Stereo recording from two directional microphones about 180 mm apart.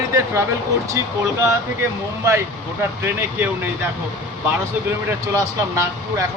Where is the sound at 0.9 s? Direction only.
15° right (ahead or behind).